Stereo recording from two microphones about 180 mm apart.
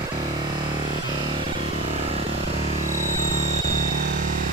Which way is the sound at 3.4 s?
40° right (ahead or behind).